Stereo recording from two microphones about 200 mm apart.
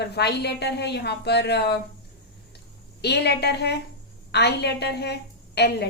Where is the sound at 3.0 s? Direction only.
55° left (ahead or behind).